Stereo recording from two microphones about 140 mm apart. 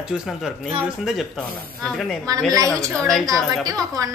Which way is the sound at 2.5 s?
25° right (ahead or behind).